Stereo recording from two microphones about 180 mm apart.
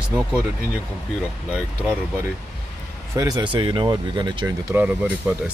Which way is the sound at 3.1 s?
20° right (ahead or behind).